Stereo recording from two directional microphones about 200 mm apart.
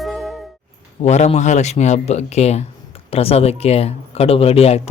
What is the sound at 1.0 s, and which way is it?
Speech, 35° left (ahead or behind).